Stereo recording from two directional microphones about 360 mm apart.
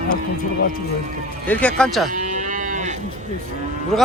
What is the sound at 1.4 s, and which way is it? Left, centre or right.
Speech, centre.